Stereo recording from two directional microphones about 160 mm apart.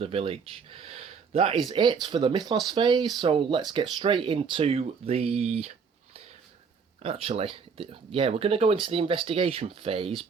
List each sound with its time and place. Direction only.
0.0 s speech: 35° right (ahead or behind)
7.0 s speech: 35° right (ahead or behind)